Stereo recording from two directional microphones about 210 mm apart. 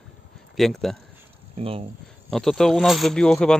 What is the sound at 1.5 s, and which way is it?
Speech, 25° right (ahead or behind).